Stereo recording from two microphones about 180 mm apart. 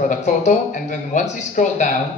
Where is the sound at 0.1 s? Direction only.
40° left (ahead or behind).